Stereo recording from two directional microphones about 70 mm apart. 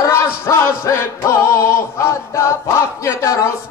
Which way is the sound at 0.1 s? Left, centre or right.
Left.